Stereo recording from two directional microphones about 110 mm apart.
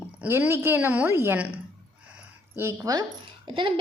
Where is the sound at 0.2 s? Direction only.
20° right (ahead or behind).